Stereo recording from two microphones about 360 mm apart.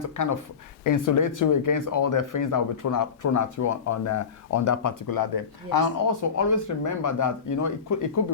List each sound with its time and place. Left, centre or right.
0.2 s speech: left